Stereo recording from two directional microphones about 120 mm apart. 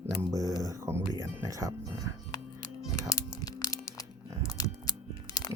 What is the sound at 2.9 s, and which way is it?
Music, 30° left (ahead or behind).